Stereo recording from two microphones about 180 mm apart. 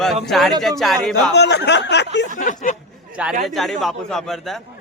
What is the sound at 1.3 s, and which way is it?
Speech, 70° left (ahead or behind).